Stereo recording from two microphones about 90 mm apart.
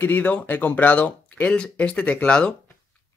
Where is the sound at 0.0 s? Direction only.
20° left (ahead or behind).